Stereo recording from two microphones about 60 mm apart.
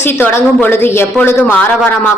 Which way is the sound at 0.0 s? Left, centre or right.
Left.